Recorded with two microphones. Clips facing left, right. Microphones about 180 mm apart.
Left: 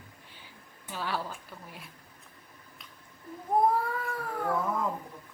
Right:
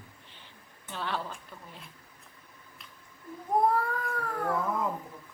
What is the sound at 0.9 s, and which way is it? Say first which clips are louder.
Speech: left 1 dB; 5° left (ahead or behind).